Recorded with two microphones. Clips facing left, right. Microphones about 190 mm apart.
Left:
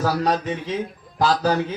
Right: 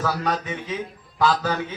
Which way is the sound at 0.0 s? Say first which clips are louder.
Left 4 dB; 35° left (ahead or behind).